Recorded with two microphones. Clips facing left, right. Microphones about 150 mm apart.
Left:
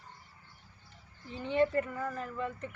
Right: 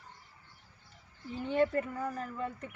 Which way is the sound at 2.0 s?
10° right (ahead or behind).